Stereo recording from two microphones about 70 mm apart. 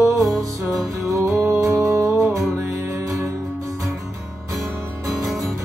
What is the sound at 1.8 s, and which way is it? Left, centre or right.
Music, right.